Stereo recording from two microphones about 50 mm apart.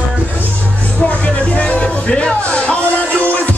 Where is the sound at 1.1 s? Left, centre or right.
Left.